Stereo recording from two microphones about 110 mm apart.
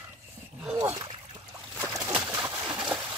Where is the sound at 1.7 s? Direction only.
20° right (ahead or behind).